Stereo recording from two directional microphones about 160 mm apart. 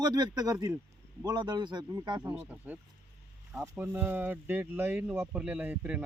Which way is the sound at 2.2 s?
10° right (ahead or behind).